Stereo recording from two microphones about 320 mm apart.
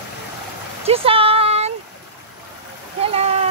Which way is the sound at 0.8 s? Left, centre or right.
Centre.